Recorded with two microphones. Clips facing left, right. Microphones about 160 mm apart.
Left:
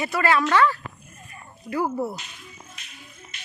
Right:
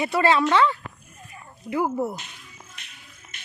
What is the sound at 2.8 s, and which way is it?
Music, 60° right (ahead or behind).